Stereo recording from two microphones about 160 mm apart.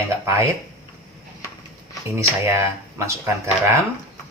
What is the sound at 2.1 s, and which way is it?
Speech, 20° right (ahead or behind).